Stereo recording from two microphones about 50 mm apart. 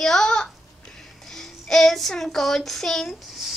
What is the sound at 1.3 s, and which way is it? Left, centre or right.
Child singing, centre.